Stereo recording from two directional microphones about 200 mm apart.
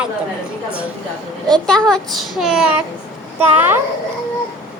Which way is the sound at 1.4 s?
Centre (ahead or behind).